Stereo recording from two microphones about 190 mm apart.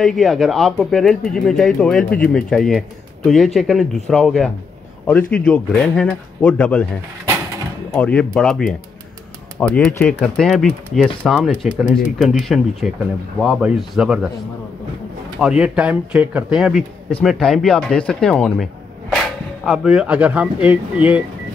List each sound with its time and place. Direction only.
0.0 s speech: centre (ahead or behind)
7.9 s speech: 5° left (ahead or behind)
15.4 s speech: 5° right (ahead or behind)